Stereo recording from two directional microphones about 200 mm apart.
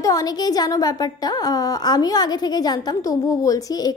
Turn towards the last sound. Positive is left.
turn(degrees=20)  # may be behind; listen again after turning